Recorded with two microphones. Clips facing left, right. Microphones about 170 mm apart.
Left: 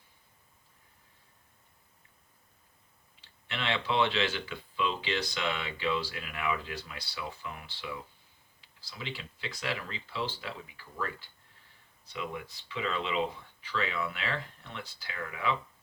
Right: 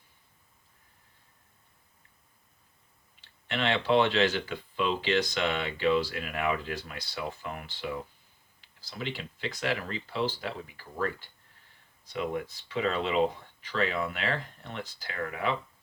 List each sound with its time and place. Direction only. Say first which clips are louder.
3.5 s speech: right 6 dB; 40° right (ahead or behind)
12.1 s speech: right 6 dB; 45° right (ahead or behind)